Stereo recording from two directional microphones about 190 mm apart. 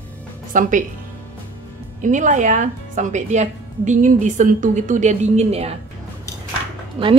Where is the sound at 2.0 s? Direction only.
40° right (ahead or behind).